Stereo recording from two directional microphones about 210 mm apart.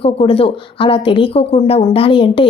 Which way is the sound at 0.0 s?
25° left (ahead or behind).